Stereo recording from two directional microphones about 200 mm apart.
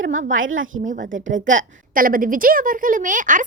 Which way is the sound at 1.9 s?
45° right (ahead or behind).